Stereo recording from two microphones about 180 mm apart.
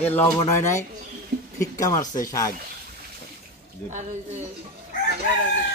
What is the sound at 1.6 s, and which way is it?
Speech, 20° left (ahead or behind).